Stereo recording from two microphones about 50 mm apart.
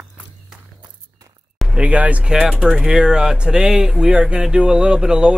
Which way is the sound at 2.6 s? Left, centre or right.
Centre.